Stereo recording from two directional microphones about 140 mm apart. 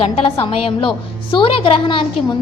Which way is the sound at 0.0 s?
40° left (ahead or behind).